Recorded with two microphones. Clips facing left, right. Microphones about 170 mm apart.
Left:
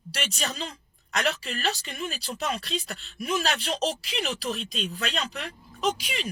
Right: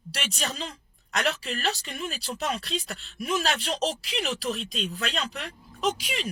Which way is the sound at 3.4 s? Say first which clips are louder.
Even; centre (ahead or behind).